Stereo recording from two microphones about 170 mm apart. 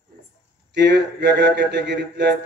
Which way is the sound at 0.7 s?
90° right.